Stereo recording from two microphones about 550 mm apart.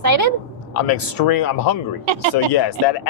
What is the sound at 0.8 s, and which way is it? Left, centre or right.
Speech, left.